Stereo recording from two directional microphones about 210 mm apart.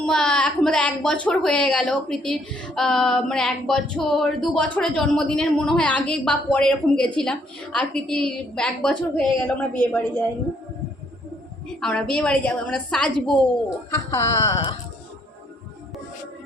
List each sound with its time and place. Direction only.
0.0 s a woman's voice: 5° left (ahead or behind)
11.8 s a woman's voice: 5° left (ahead or behind)
13.9 s speech: 15° left (ahead or behind)